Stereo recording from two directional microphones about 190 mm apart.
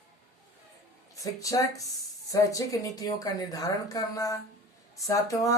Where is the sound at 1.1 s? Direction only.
20° left (ahead or behind).